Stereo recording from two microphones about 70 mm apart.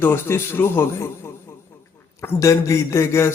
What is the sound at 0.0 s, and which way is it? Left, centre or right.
Speech, left.